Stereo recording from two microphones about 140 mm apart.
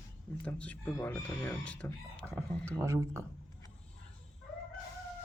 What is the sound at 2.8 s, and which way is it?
Speech, 20° right (ahead or behind).